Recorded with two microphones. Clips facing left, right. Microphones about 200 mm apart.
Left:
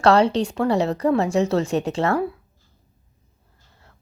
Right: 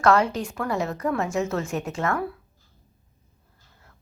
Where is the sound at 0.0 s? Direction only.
30° left (ahead or behind).